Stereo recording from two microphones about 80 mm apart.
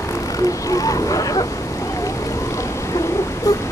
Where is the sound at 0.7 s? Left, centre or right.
Left.